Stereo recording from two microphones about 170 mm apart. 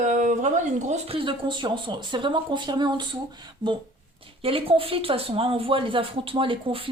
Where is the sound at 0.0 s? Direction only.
45° right (ahead or behind); by 3.2 s 25° right (ahead or behind).